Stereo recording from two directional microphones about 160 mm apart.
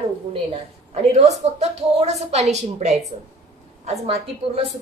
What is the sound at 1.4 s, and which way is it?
A woman's voice, 45° right (ahead or behind).